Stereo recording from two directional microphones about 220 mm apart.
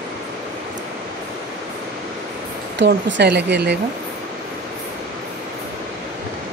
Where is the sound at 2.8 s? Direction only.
55° right (ahead or behind).